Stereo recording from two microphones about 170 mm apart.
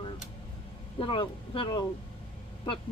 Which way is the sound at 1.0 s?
30° left (ahead or behind).